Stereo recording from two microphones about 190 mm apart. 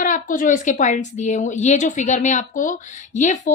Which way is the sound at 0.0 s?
45° left (ahead or behind).